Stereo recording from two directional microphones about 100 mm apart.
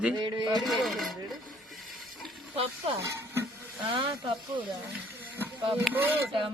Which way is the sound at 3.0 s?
30° right (ahead or behind).